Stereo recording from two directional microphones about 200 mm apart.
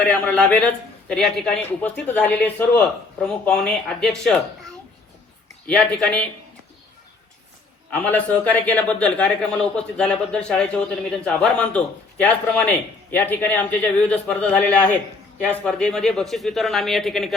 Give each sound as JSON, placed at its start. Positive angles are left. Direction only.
{"t": 0.0, "sound": "a man's voice", "side_deg": 10}
{"t": 7.9, "sound": "a man's voice", "side_deg": 10}